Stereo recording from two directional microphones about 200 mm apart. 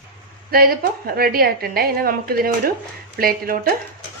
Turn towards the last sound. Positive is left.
turn(degrees=-45)  # may be behind; listen again after turning